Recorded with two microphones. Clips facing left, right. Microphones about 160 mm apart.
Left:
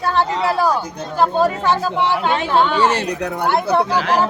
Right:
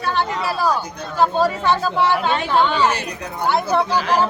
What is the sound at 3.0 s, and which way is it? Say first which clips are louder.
Speech: left 5 dB; 70° left (ahead or behind).